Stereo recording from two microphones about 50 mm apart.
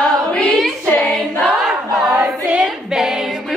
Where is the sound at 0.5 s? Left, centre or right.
Centre.